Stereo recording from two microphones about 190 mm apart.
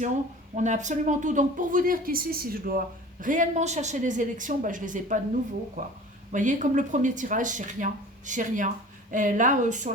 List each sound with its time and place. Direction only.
0.5 s speech: 40° right (ahead or behind)
6.3 s a woman's voice: 40° right (ahead or behind)